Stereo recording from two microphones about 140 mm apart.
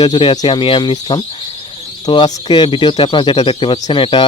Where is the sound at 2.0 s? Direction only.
35° left (ahead or behind).